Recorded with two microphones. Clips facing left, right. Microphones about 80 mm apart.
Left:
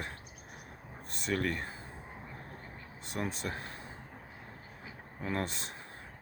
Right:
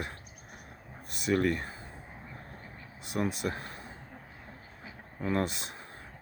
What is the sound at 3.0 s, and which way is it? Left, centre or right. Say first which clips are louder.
Speech: right 5 dB; centre.